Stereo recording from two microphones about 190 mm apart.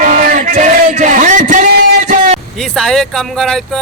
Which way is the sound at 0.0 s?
45° right (ahead or behind).